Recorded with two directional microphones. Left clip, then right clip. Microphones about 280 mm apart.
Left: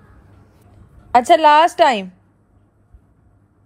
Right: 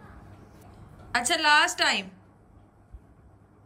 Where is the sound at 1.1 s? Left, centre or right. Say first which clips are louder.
Left 12 dB; centre.